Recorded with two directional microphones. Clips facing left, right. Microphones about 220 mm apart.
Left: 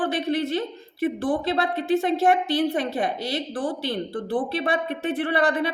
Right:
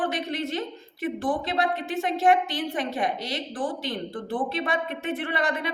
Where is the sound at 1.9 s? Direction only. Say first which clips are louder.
Left 4 dB; 35° left (ahead or behind).